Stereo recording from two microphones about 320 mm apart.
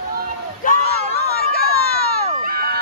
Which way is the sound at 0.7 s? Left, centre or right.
Left.